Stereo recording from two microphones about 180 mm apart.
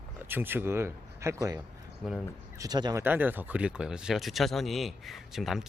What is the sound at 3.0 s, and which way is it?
Speech, 10° right (ahead or behind).